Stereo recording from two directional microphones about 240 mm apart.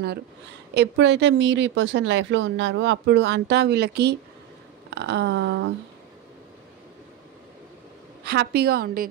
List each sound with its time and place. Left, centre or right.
0.7 s speech: right
8.2 s a woman's voice: right